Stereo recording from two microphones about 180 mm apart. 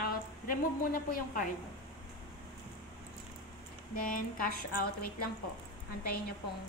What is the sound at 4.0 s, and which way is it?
A woman's voice, 50° left (ahead or behind).